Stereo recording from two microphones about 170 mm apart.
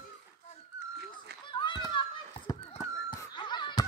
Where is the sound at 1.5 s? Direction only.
25° left (ahead or behind).